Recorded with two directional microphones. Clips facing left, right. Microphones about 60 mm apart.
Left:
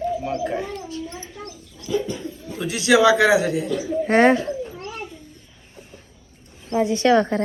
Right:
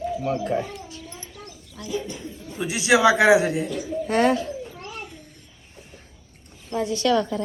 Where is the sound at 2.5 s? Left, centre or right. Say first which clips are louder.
Left 2 dB; centre.